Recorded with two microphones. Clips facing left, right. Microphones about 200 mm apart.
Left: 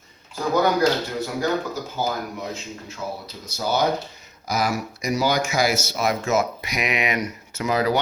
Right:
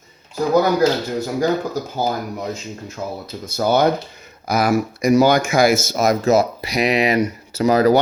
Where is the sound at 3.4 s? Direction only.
55° right (ahead or behind).